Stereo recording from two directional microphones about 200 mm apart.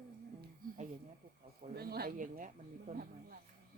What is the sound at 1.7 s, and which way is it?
Speech, 50° right (ahead or behind).